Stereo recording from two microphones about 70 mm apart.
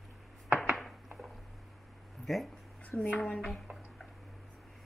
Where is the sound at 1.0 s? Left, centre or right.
Centre.